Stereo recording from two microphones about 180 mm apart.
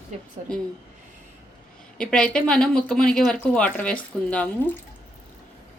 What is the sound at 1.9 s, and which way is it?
Speech, 5° left (ahead or behind).